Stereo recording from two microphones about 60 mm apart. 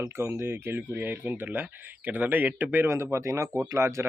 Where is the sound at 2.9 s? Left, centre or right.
Right.